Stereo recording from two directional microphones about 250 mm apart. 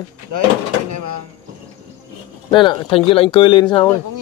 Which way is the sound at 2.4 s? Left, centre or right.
Centre.